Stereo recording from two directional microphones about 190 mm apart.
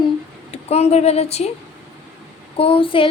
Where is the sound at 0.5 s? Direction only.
35° left (ahead or behind).